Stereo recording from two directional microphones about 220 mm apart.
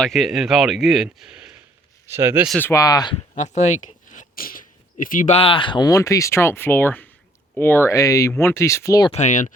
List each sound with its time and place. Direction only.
0.0 s speech: centre (ahead or behind)
2.6 s speech: 10° left (ahead or behind)
3.3 s speech: 35° left (ahead or behind); by 9.1 s 15° left (ahead or behind)
9.1 s speech: 35° left (ahead or behind)